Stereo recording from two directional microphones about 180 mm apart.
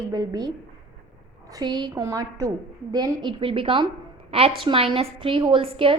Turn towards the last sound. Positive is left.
turn(degrees=-30)  # may be behind; listen again after turning